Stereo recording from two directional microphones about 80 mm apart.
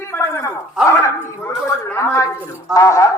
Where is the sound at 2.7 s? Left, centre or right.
Left.